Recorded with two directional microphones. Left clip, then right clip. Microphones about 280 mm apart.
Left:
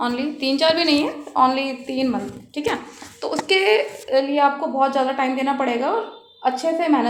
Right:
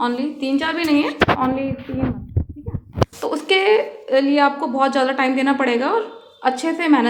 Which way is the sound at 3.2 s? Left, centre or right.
Centre.